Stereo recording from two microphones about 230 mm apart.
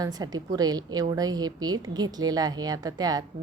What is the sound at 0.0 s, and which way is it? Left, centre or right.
A woman's voice, centre.